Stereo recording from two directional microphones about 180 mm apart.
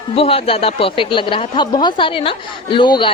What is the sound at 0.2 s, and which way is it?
A woman's voice, 30° left (ahead or behind).